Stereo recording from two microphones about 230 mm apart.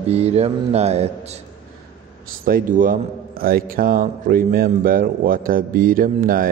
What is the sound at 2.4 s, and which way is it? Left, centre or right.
A man's voice, right.